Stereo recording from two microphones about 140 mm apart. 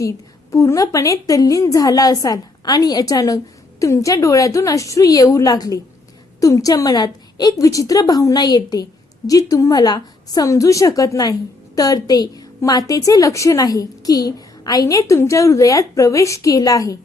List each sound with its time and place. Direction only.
0.0 s a woman's voice: 20° left (ahead or behind)